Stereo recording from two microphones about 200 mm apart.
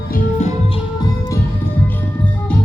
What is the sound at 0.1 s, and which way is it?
Music, 35° left (ahead or behind).